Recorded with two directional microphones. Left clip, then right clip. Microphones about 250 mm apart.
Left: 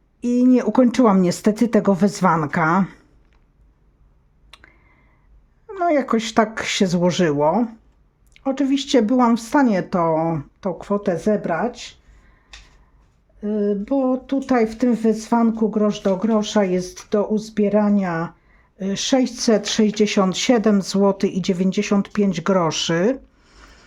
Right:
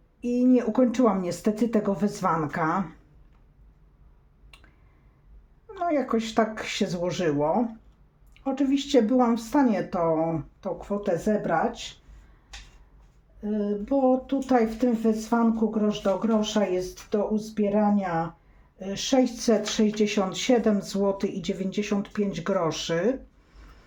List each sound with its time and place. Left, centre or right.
0.2 s speech: left
4.5 s a sound: left
5.6 s speech: left
13.4 s speech: left